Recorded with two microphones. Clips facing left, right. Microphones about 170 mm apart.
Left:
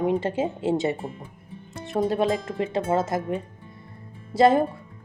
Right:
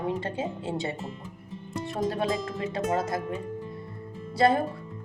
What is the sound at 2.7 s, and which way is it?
Speech, 25° left (ahead or behind).